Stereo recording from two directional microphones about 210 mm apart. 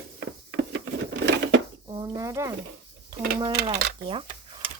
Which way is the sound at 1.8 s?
20° right (ahead or behind).